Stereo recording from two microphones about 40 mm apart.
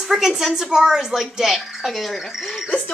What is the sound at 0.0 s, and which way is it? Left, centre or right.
A woman's voice, centre.